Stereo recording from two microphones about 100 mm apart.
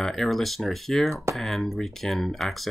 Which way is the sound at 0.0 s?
Centre (ahead or behind).